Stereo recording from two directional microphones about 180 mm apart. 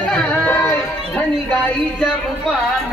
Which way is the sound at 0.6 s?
10° left (ahead or behind).